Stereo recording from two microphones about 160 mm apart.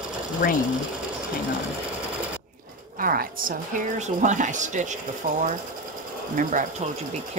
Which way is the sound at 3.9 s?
50° right (ahead or behind).